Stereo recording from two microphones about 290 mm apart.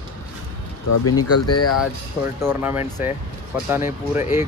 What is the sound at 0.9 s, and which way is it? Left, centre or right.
Speech, left.